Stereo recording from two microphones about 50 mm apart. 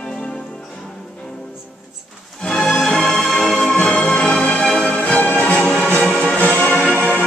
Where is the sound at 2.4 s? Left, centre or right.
Centre.